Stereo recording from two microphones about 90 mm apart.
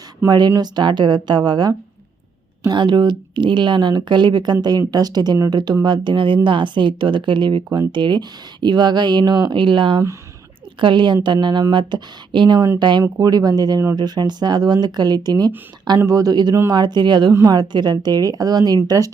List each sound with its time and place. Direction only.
0.3 s speech: 50° right (ahead or behind)
13.0 s speech: 45° right (ahead or behind)